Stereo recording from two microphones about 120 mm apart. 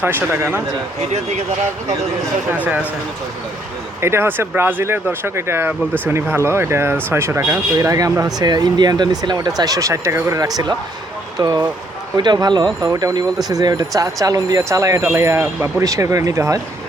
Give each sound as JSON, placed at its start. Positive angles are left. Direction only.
{"t": 0.0, "sound": "speech", "side_deg": -15}
{"t": 4.0, "sound": "speech", "side_deg": -20}